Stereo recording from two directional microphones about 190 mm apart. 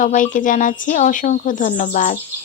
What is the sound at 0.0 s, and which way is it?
Speech, 45° left (ahead or behind).